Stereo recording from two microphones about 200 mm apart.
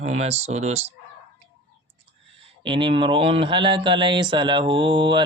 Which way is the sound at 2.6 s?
25° right (ahead or behind).